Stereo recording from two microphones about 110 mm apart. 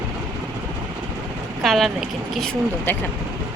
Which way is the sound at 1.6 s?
Centre (ahead or behind).